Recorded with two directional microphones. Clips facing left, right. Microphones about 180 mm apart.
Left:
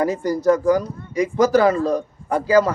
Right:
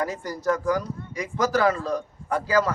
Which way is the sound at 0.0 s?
20° left (ahead or behind).